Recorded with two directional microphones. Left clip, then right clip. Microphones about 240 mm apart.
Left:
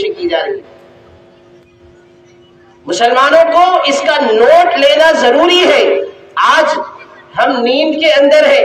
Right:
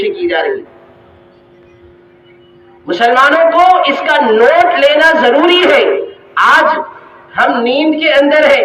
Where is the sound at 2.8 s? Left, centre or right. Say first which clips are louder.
Right 1 dB; right.